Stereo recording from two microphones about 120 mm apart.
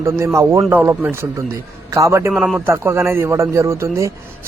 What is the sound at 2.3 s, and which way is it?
Speech, centre (ahead or behind).